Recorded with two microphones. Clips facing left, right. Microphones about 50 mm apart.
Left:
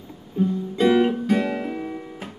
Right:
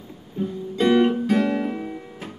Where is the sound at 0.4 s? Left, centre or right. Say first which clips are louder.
Left 3 dB; centre.